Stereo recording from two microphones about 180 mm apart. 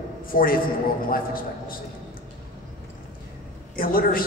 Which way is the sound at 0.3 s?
50° left (ahead or behind).